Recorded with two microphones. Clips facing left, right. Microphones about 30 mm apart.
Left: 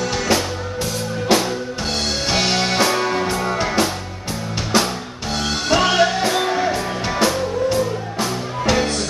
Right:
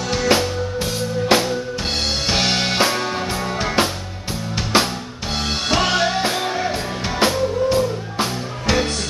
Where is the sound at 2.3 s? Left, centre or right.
Centre.